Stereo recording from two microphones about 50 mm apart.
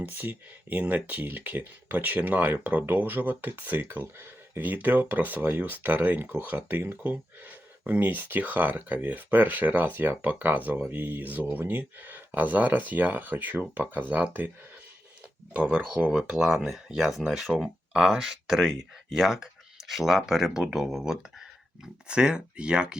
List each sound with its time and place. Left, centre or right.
0.0 s speech: right
3.8 s speech: right
4.6 s speech: right
15.5 s speech: right
16.3 s speech: centre